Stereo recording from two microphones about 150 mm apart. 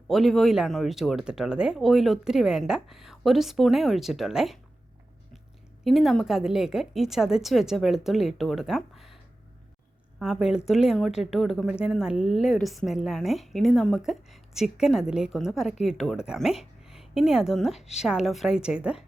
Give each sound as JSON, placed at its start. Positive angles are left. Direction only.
{"t": 0.1, "sound": "speech", "side_deg": 0}
{"t": 5.8, "sound": "speech", "side_deg": 0}
{"t": 10.2, "sound": "speech", "side_deg": -5}